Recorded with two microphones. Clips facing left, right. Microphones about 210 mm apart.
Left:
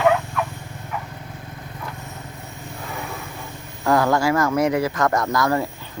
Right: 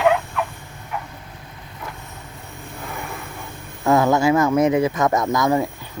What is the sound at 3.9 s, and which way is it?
Speech, 20° right (ahead or behind).